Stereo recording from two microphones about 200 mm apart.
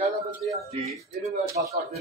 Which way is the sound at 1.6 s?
50° right (ahead or behind).